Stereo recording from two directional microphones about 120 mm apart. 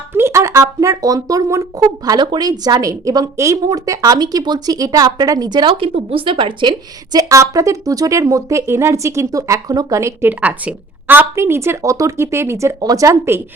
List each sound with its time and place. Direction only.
0.1 s a woman's voice: 20° right (ahead or behind)